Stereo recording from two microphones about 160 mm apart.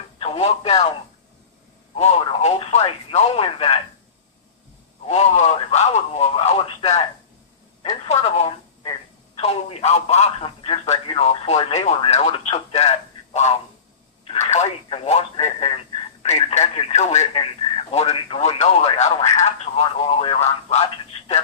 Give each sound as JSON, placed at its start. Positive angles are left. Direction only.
{"t": 0.2, "sound": "speech", "side_deg": 40}
{"t": 2.0, "sound": "speech", "side_deg": 40}
{"t": 5.0, "sound": "speech", "side_deg": 40}
{"t": 8.0, "sound": "speech", "side_deg": 40}